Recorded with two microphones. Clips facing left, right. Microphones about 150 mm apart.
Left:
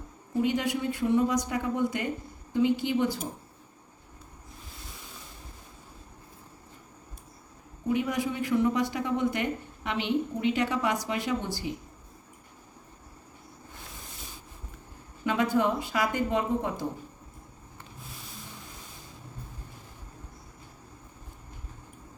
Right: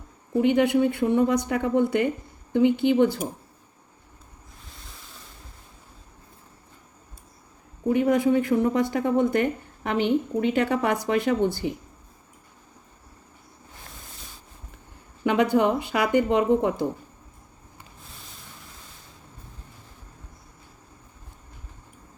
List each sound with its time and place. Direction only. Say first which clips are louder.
0.4 s speech: right 9 dB; 60° right (ahead or behind)
7.9 s speech: right 8 dB; 55° right (ahead or behind)
15.2 s speech: right 5 dB; 65° right (ahead or behind)